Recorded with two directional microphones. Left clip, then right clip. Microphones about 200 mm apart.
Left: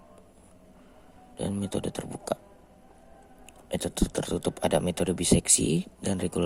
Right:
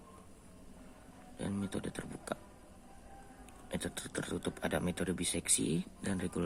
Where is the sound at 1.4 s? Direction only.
25° left (ahead or behind).